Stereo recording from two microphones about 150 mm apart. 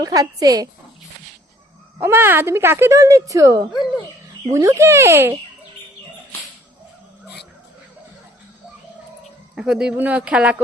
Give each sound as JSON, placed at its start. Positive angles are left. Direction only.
{"t": 0.0, "sound": "speech", "side_deg": -25}
{"t": 2.0, "sound": "speech", "side_deg": -15}
{"t": 9.6, "sound": "speech", "side_deg": -5}